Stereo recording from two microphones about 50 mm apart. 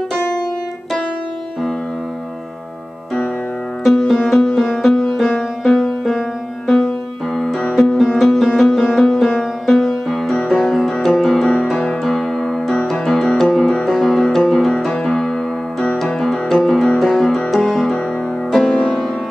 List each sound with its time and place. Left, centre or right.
3.8 s music: centre
7.3 s music: centre
10.3 s music: centre
10.6 s music: centre
11.7 s music: centre
12.0 s music: centre